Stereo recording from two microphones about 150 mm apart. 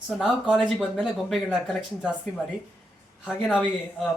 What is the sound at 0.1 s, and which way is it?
Speech, centre (ahead or behind).